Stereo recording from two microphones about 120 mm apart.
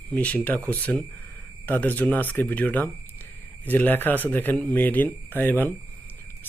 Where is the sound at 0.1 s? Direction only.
10° left (ahead or behind).